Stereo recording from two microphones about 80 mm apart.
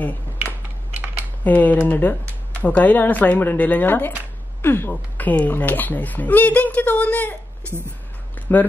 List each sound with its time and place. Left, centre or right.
0.9 s typing: centre
1.4 s speech: centre
8.5 s speech: left